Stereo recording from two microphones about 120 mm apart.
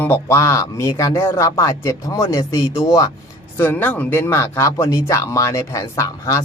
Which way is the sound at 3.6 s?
15° left (ahead or behind).